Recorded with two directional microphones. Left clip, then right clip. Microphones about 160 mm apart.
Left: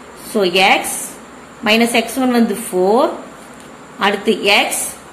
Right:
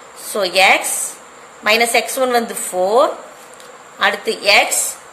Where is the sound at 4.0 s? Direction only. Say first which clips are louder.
Left 1 dB; 35° right (ahead or behind).